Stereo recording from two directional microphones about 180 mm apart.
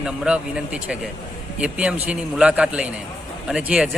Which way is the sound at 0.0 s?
5° right (ahead or behind).